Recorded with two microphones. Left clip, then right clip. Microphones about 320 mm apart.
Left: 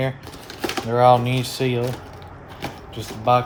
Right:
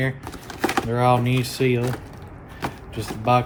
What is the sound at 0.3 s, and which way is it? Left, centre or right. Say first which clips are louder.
Typewriter: right 3 dB; centre.